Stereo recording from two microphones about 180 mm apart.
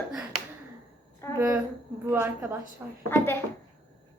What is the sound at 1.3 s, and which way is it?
A woman's voice, 15° right (ahead or behind).